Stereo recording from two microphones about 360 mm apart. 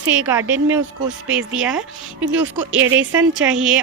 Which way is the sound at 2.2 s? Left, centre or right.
Right.